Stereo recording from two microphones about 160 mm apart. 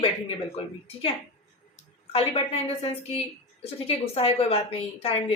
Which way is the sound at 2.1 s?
35° left (ahead or behind).